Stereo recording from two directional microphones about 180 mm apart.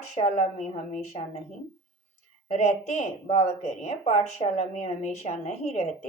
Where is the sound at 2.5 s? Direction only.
40° left (ahead or behind).